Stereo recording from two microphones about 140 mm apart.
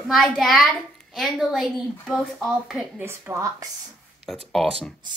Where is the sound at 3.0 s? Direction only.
15° right (ahead or behind).